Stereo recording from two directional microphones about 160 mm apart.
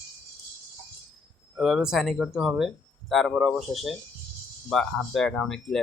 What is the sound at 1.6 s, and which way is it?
A man's voice, centre (ahead or behind).